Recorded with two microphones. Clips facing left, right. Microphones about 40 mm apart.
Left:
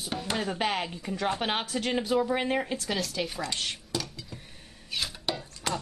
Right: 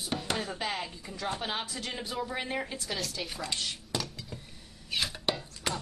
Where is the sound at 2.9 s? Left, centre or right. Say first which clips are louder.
Left 4 dB; centre.